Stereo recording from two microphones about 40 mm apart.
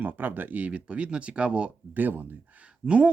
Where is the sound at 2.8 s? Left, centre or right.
Right.